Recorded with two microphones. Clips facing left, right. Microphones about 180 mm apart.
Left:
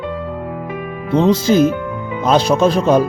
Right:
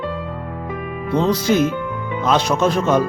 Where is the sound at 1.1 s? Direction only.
25° left (ahead or behind).